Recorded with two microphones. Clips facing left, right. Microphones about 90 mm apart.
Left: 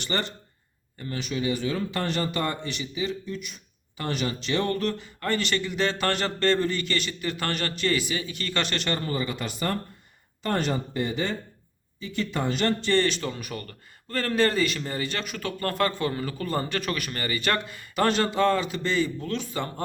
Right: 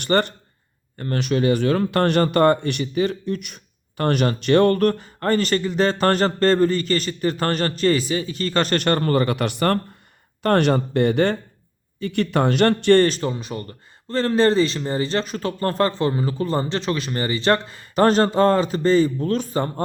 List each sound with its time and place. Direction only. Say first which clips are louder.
0.0 s speech: right 10 dB; 55° right (ahead or behind)
13.1 s a man's voice: right 5 dB; 40° right (ahead or behind)
13.3 s a man's voice: right 6 dB; 25° right (ahead or behind)